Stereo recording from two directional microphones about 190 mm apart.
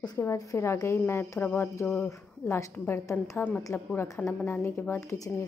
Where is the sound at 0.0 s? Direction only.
20° left (ahead or behind).